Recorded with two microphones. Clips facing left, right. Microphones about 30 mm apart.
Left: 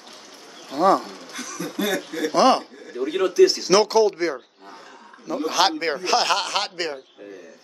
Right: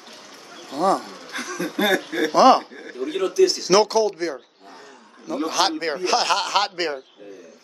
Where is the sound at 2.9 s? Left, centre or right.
Centre.